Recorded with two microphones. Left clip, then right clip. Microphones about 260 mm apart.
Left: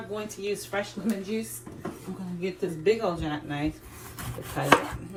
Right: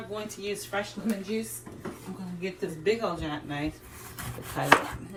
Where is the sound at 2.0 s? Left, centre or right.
Centre.